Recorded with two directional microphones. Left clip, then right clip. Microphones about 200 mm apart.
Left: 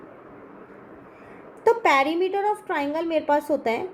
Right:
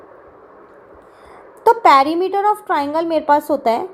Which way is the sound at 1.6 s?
20° right (ahead or behind).